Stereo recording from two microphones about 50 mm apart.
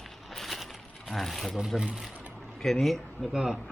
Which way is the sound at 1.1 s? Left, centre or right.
Centre.